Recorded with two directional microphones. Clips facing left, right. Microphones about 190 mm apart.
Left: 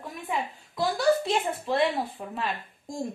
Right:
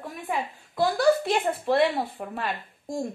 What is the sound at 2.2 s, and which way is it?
Speech, 45° right (ahead or behind).